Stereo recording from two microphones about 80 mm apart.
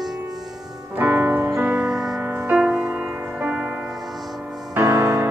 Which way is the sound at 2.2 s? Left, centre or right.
Right.